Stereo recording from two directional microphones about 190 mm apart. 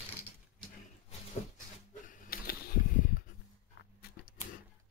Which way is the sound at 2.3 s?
50° left (ahead or behind).